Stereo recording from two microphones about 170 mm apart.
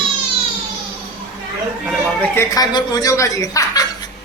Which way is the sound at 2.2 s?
15° left (ahead or behind).